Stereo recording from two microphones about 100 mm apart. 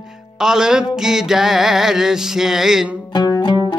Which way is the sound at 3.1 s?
45° left (ahead or behind).